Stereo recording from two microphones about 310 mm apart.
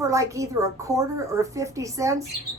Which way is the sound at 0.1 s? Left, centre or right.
Centre.